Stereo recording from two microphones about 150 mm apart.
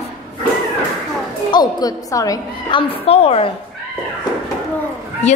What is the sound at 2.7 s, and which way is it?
Speech, 40° left (ahead or behind).